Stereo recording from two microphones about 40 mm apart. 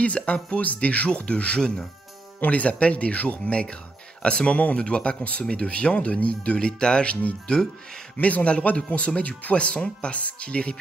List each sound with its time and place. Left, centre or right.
0.0 s speech: left
8.2 s speech: left